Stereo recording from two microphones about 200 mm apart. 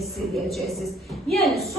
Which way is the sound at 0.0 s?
Centre (ahead or behind).